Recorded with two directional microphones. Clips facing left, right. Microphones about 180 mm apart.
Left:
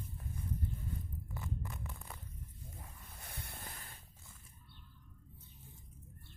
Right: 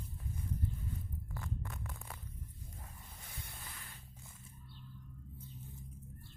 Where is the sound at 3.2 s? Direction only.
60° left (ahead or behind).